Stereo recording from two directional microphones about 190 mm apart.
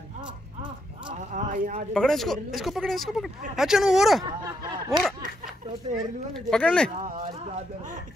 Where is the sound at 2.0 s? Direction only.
Centre (ahead or behind).